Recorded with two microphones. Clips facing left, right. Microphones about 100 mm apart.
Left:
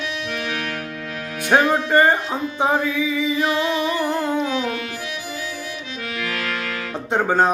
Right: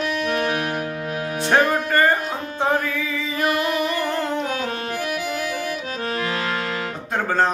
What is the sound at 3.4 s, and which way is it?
Music, 55° right (ahead or behind).